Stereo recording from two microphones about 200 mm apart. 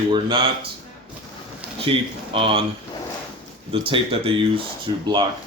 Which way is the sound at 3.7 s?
25° right (ahead or behind).